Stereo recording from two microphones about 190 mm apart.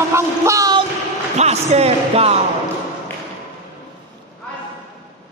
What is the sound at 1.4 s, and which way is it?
Speech, 35° right (ahead or behind).